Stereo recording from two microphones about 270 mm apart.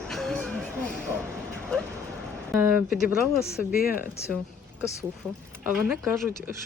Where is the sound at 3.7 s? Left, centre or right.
Left.